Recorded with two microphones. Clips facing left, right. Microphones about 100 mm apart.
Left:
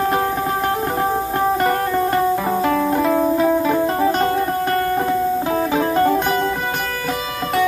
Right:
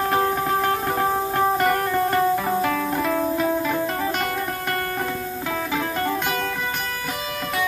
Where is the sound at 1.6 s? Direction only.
20° left (ahead or behind).